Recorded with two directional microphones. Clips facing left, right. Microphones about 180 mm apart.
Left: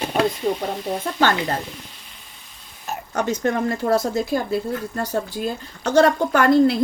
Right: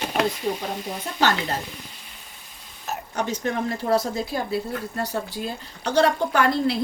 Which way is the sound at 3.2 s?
50° left (ahead or behind).